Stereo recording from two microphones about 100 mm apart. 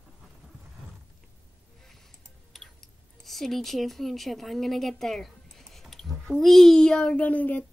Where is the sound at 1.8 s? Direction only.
Centre (ahead or behind).